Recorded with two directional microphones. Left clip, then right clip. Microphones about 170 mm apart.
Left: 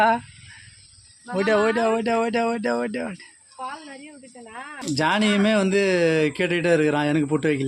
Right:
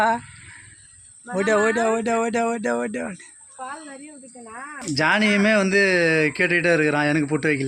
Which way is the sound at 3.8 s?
50° right (ahead or behind).